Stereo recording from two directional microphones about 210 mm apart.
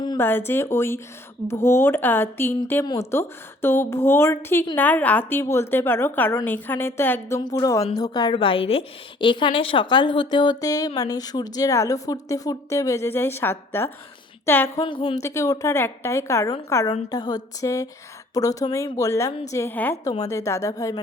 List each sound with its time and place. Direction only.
0.0 s a woman's voice: 15° left (ahead or behind)
14.8 s a woman's voice: 25° left (ahead or behind)